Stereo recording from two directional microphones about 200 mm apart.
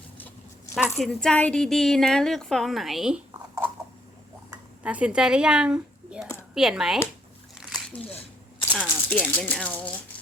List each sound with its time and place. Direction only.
0.9 s speech: centre (ahead or behind)
4.8 s speech: 5° right (ahead or behind)
7.6 s a sound: 5° left (ahead or behind)
8.7 s speech: 5° left (ahead or behind)